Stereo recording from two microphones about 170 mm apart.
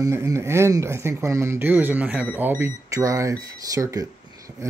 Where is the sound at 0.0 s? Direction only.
15° right (ahead or behind).